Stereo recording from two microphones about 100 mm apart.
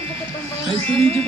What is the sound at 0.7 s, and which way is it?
Music, 90° right.